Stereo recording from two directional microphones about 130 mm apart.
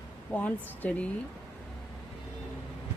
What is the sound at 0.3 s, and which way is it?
Speech, 10° left (ahead or behind).